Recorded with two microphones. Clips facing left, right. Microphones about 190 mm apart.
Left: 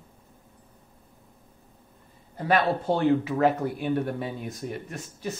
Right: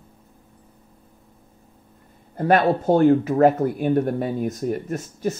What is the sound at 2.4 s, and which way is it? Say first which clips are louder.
Speech: right 6 dB; 50° right (ahead or behind).